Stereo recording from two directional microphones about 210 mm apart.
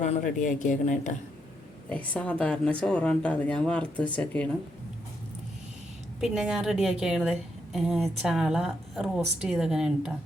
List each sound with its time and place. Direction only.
0.0 s speech: 35° left (ahead or behind)
1.9 s a woman's voice: 5° left (ahead or behind)
6.1 s a woman's voice: centre (ahead or behind)